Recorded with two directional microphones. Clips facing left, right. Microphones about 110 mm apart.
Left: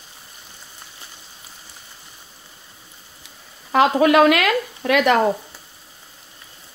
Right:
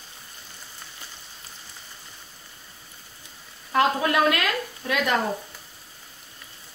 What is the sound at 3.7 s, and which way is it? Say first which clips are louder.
Speech: left 7 dB; 90° left.